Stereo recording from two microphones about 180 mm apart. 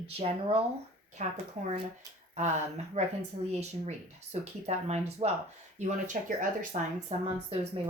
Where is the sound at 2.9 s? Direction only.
35° right (ahead or behind).